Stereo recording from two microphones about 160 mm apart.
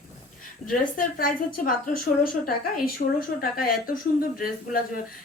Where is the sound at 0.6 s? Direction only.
40° left (ahead or behind).